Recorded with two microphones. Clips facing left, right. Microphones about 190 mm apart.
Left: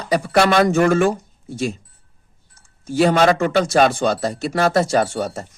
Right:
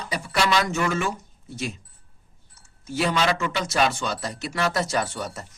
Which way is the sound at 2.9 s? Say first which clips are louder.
Left 9 dB; 50° left (ahead or behind).